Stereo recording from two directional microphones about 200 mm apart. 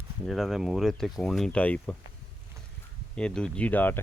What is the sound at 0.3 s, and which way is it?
Speech, centre (ahead or behind).